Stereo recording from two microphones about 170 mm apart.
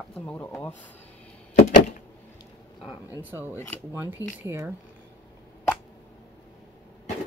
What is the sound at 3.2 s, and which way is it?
Speech, 10° right (ahead or behind).